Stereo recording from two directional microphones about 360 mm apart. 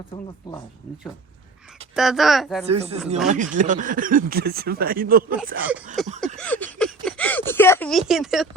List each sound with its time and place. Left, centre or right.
2.0 s speech: centre
2.6 s speech: centre
6.1 s a sound: centre